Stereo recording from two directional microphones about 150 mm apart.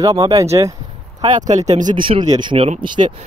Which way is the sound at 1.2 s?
55° right (ahead or behind).